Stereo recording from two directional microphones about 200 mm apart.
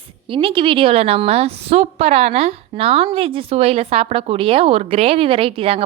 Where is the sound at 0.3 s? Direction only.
25° right (ahead or behind).